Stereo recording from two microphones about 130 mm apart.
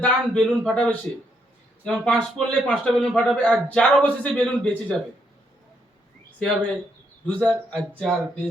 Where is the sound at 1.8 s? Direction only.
5° left (ahead or behind).